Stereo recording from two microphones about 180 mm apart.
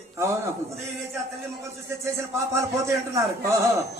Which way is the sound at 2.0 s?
15° right (ahead or behind).